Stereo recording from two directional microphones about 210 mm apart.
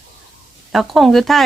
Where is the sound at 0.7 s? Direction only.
Centre (ahead or behind).